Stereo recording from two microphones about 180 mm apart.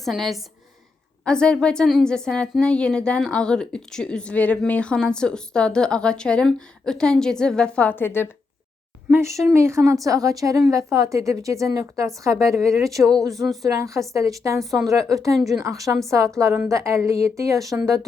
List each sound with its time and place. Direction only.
0.0 s a woman's voice: centre (ahead or behind)
9.0 s a woman's voice: 10° right (ahead or behind)
13.0 s a woman's voice: centre (ahead or behind)
13.6 s a woman's voice: 20° right (ahead or behind)